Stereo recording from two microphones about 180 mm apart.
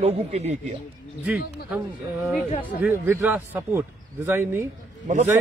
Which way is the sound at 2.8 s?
10° right (ahead or behind).